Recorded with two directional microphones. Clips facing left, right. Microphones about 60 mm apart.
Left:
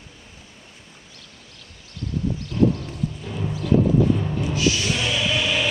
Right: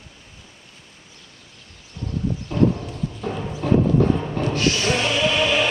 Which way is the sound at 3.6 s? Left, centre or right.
Right.